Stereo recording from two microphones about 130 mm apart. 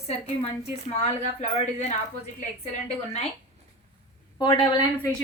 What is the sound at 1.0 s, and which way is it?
Speech, 60° left (ahead or behind).